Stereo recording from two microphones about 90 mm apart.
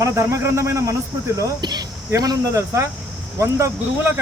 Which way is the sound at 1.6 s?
50° right (ahead or behind).